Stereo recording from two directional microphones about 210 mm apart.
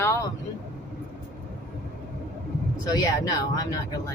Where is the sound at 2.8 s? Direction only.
20° left (ahead or behind).